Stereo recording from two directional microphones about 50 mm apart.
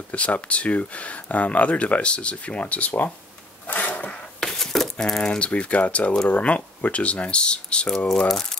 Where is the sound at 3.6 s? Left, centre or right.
Left.